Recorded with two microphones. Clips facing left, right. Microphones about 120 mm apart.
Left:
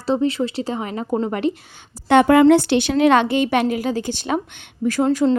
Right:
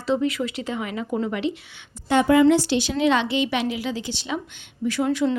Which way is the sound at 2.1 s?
65° left (ahead or behind).